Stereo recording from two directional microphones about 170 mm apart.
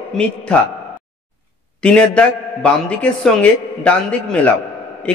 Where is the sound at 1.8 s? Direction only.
5° left (ahead or behind).